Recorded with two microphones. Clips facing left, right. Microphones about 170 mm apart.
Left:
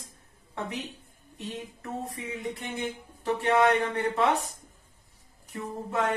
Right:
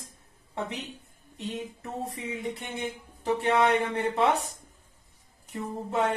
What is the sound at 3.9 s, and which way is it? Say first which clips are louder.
Speech: right 1 dB; 25° right (ahead or behind).